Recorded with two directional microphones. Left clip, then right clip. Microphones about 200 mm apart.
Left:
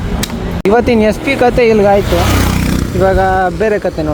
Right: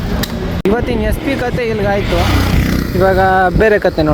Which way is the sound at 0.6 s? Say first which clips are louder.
Left 6 dB; 30° left (ahead or behind).